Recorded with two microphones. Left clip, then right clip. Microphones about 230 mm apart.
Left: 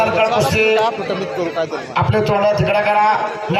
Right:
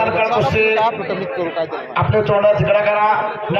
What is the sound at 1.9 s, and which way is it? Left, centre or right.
A man's voice, left.